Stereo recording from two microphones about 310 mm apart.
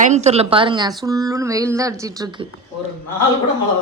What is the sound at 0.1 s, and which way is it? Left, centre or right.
A woman's voice, right.